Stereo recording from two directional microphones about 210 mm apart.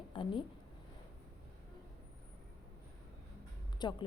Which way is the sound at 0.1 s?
25° left (ahead or behind).